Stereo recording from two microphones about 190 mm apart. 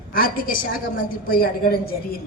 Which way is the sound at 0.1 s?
50° left (ahead or behind).